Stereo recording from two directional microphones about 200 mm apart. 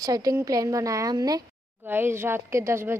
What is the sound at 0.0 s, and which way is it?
Speech, 20° right (ahead or behind).